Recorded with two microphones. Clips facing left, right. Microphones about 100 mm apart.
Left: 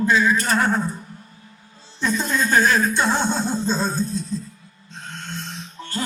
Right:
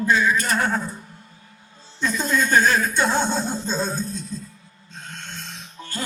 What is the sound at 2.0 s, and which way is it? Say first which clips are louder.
Speech: even; 35° left (ahead or behind).